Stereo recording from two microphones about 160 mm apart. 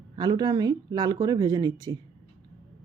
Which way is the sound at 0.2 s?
25° right (ahead or behind).